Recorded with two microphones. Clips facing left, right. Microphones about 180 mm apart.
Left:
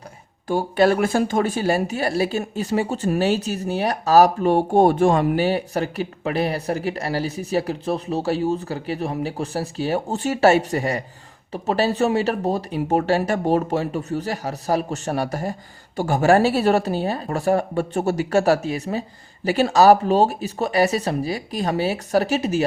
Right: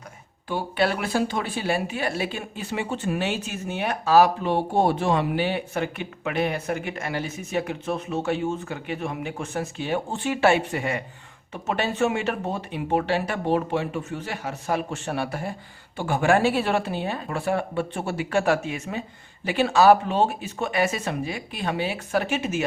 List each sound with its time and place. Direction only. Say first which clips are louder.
0.4 s speech: left 7 dB; 45° left (ahead or behind)